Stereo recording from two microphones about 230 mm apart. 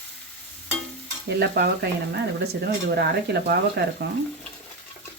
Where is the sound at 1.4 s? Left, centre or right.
Right.